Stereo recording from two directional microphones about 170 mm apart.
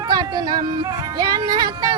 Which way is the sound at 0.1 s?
25° right (ahead or behind).